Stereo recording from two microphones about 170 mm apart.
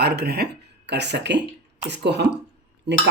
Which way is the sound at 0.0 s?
75° right (ahead or behind).